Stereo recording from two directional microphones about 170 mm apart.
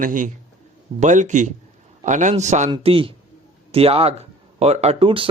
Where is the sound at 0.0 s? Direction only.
50° right (ahead or behind).